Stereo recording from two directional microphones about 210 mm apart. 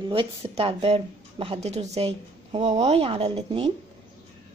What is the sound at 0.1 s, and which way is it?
A woman's voice, 25° right (ahead or behind).